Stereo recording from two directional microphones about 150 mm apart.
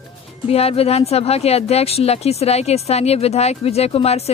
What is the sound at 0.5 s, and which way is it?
Speech, 40° left (ahead or behind).